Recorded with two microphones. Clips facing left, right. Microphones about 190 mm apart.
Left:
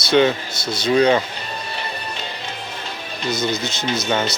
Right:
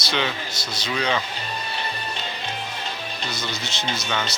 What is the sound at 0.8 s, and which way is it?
Speech, 45° left (ahead or behind).